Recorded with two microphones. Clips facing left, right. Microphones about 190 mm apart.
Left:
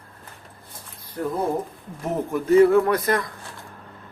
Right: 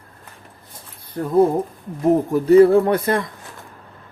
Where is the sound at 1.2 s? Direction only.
35° right (ahead or behind).